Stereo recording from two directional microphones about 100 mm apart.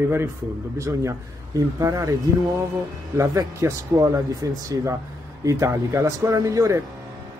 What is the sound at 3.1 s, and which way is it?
Speech, 30° right (ahead or behind).